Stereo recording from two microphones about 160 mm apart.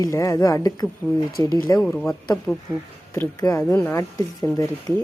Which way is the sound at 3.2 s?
20° left (ahead or behind).